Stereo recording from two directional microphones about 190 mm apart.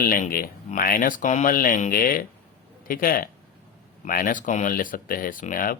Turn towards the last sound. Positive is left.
turn(degrees=45)  # may be behind; listen again after turning